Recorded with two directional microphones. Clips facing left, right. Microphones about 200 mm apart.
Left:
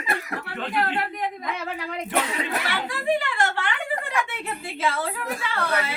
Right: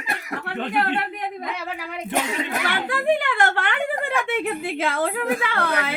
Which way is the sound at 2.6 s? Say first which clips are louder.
Right 4 dB; 55° right (ahead or behind).